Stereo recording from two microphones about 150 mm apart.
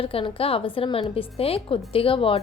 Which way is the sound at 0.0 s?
40° left (ahead or behind).